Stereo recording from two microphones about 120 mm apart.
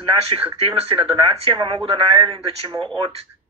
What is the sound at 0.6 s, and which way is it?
A man's voice, 50° right (ahead or behind).